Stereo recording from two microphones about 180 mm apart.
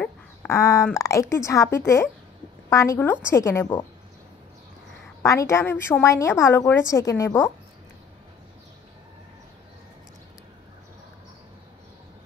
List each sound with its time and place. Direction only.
0.0 s a sound: 10° left (ahead or behind)
0.9 s a woman's voice: 15° left (ahead or behind)
5.2 s a woman's voice: 15° left (ahead or behind)